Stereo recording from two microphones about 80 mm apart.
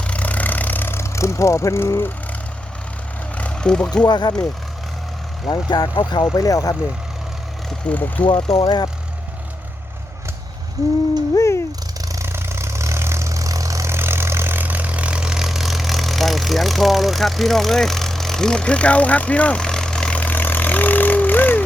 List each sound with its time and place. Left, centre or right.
0.0 s vehicle: centre; by 2.1 s left
3.3 s vehicle: centre
3.9 s speech: left
5.5 s speech: left
6.3 s speech: left
7.9 s speech: left
8.2 s speech: left
11.3 s cat: left
12.0 s vehicle: right
12.3 s vehicle: right; by 21.6 s left